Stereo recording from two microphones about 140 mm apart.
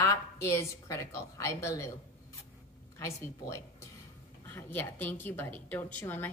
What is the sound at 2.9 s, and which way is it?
A woman's voice, 20° left (ahead or behind).